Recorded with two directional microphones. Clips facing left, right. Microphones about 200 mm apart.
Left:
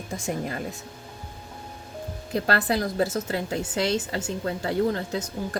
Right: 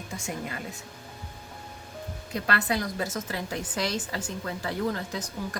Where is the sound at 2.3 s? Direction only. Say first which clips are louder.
Left 4 dB; 35° left (ahead or behind).